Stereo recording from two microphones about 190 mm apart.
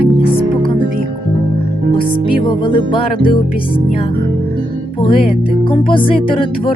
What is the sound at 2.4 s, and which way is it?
Music, 25° left (ahead or behind).